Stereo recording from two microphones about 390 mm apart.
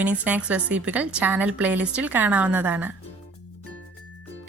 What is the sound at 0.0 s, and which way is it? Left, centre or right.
Speech, centre.